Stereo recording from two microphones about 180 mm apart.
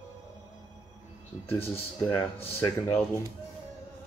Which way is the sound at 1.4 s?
35° left (ahead or behind).